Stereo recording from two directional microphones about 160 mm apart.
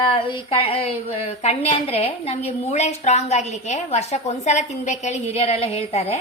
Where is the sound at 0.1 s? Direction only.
30° left (ahead or behind).